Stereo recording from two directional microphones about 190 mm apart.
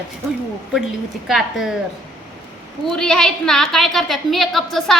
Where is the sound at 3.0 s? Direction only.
5° left (ahead or behind).